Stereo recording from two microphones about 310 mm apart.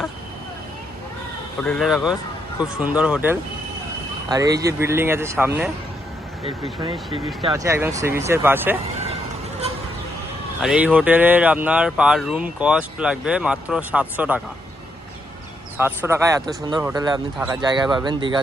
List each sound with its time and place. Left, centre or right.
1.6 s speech: centre
7.4 s speech: centre
10.6 s speech: centre
15.8 s speech: centre